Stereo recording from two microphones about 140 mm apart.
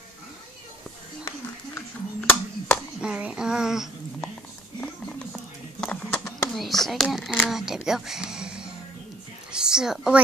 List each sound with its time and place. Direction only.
1.8 s music: 15° left (ahead or behind)
3.0 s a child's voice: 10° right (ahead or behind)
5.3 s a sound: 10° left (ahead or behind)
6.5 s speech: centre (ahead or behind)